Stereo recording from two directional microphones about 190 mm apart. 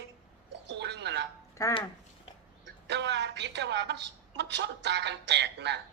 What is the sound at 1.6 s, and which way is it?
Speech, 15° left (ahead or behind).